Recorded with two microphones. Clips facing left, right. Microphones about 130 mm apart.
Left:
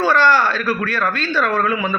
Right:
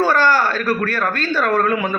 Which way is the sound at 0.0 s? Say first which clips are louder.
Left 1 dB; 45° right (ahead or behind).